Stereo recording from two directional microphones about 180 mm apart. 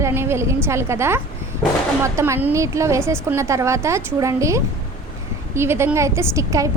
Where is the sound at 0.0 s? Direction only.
15° right (ahead or behind).